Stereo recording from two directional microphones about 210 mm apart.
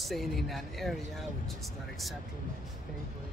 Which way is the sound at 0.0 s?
Centre (ahead or behind).